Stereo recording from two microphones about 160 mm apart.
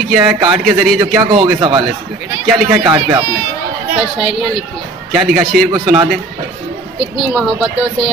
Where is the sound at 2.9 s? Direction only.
15° right (ahead or behind).